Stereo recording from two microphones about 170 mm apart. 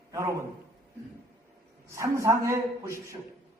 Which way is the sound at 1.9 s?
15° right (ahead or behind).